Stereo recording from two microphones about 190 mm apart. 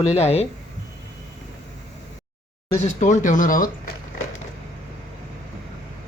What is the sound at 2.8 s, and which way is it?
Speech, 40° left (ahead or behind).